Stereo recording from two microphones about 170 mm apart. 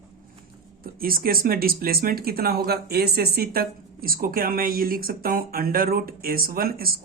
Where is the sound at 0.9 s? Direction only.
60° right (ahead or behind).